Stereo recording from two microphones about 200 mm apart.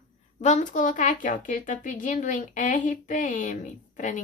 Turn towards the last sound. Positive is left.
turn(degrees=40)  # may be behind; listen again after turning